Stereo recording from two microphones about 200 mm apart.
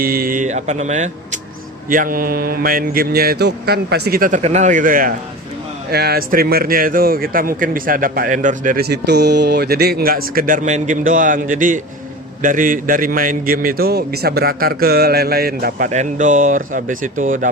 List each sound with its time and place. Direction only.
0.0 s a man's voice: 45° right (ahead or behind)
4.4 s a man's voice: 35° right (ahead or behind)
15.9 s speech: 35° right (ahead or behind)